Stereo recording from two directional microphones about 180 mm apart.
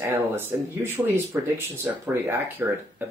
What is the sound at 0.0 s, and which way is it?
Speech, 15° right (ahead or behind).